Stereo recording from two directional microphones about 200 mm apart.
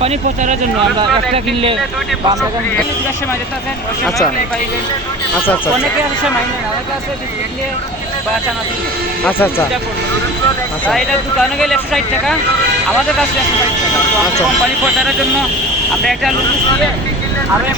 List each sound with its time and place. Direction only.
0.0 s speech: 30° right (ahead or behind)
9.2 s speech: 10° left (ahead or behind)
10.8 s speech: 5° left (ahead or behind)